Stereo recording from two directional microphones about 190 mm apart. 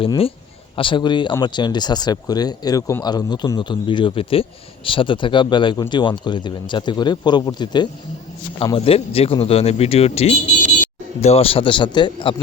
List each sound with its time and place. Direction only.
0.0 s a man's voice: 30° left (ahead or behind)